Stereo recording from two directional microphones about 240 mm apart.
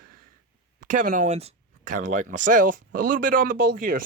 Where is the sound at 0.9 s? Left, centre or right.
Right.